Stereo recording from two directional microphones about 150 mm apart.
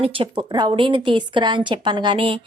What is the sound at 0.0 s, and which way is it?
A woman's voice, 30° right (ahead or behind).